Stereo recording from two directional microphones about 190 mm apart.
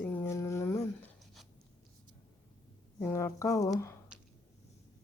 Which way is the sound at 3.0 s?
15° left (ahead or behind).